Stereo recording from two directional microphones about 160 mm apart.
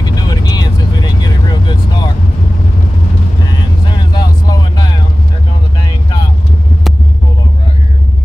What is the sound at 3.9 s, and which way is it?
Vehicle, 25° left (ahead or behind).